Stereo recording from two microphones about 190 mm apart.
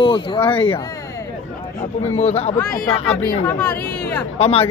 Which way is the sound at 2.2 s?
35° left (ahead or behind).